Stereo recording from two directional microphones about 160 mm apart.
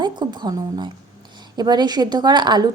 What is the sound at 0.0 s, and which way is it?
A woman's voice, 25° right (ahead or behind).